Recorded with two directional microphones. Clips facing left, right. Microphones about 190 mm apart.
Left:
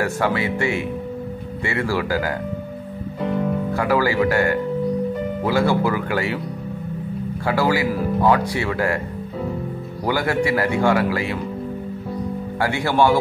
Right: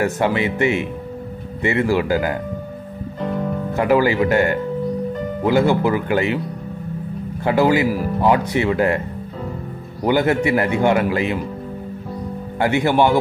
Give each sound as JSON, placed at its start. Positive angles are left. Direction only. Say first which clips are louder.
{"t": 0.0, "sound": "speech", "louder": "right 2 dB", "side_deg": -20}
{"t": 3.2, "sound": "music", "louder": "left 1 dB", "side_deg": 5}
{"t": 3.7, "sound": "speech", "louder": "right 4 dB", "side_deg": -20}
{"t": 7.4, "sound": "speech", "louder": "right 4 dB", "side_deg": -20}
{"t": 10.0, "sound": "speech", "louder": "right 4 dB", "side_deg": -20}
{"t": 12.5, "sound": "speech", "louder": "right 3 dB", "side_deg": -20}